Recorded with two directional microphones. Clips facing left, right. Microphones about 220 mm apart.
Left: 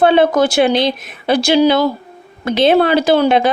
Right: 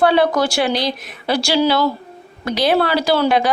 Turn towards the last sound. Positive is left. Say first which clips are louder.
# left 4 dB
turn(degrees=25)  # may be behind; listen again after turning